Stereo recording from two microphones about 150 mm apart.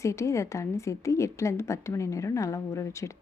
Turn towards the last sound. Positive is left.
turn(degrees=20)  # may be behind; listen again after turning